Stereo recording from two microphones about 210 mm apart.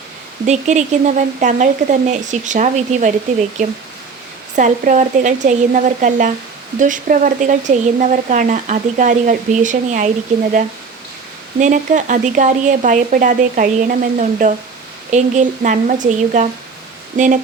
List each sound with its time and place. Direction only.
0.4 s speech: 35° right (ahead or behind)
4.5 s speech: 35° right (ahead or behind)
11.6 s speech: 35° right (ahead or behind)